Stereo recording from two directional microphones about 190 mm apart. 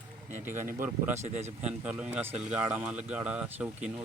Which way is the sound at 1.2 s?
35° right (ahead or behind).